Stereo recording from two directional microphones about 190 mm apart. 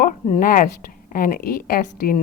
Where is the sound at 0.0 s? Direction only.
45° left (ahead or behind).